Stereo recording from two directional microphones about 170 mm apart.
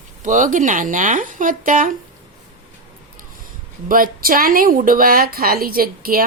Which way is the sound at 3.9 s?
55° right (ahead or behind).